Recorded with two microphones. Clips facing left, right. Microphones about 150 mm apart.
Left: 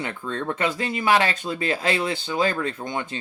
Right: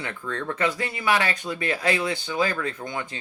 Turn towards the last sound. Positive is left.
turn(degrees=25)  # may be behind; listen again after turning